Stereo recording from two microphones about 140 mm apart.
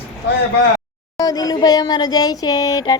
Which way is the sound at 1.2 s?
25° left (ahead or behind).